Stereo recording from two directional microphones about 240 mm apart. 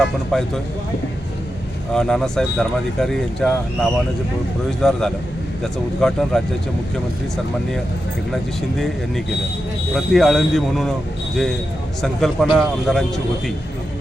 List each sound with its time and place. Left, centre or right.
0.0 s speech: centre
1.9 s speech: centre
9.9 s speech: centre
12.0 s speech: centre